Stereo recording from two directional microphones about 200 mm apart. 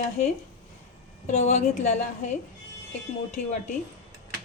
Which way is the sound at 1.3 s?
35° left (ahead or behind).